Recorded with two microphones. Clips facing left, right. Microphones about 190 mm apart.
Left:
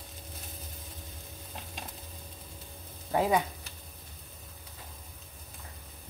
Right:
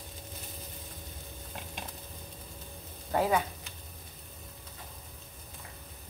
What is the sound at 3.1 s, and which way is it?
Speech, 15° left (ahead or behind).